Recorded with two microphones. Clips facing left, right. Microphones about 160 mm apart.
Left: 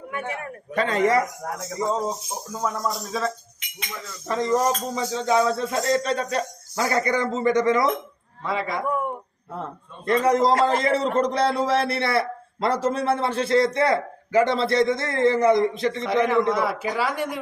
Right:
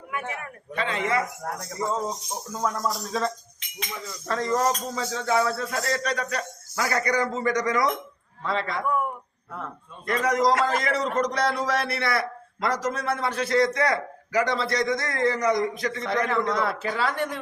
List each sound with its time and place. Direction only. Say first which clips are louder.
0.4 s a man's voice: left 5 dB; 45° left (ahead or behind)
1.8 s speech: left 3 dB; 15° left (ahead or behind)
2.5 s speech: left 1 dB; 5° left (ahead or behind)
4.3 s a man's voice: left 3 dB; 15° left (ahead or behind)
8.4 s speech: left 1 dB; 10° left (ahead or behind)
10.1 s a man's voice: left 3 dB; 30° left (ahead or behind)
16.0 s speech: left 5 dB; 10° left (ahead or behind)